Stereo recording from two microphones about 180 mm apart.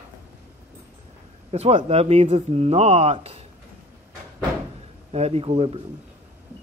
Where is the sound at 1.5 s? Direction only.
35° right (ahead or behind).